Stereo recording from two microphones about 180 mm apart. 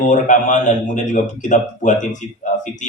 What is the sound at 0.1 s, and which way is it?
A man's voice, 45° left (ahead or behind).